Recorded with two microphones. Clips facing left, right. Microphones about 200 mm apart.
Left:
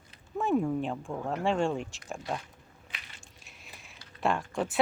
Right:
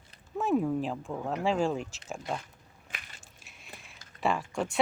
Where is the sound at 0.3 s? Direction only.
Centre (ahead or behind).